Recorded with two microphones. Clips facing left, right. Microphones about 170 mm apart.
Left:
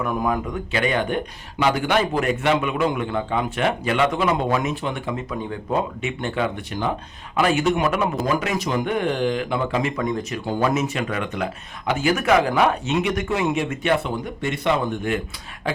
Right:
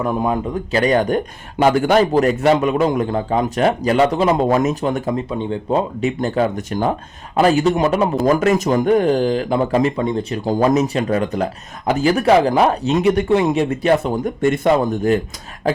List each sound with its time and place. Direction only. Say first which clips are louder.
0.0 s speech: right 4 dB; 30° right (ahead or behind)
5.3 s speech: right 4 dB; 25° right (ahead or behind)
8.3 s speech: right 8 dB; 45° right (ahead or behind)